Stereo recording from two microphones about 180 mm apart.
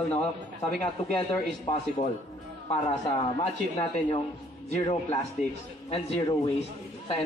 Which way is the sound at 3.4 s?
35° left (ahead or behind).